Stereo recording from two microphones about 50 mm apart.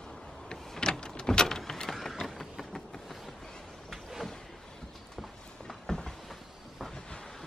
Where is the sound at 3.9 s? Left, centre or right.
Centre.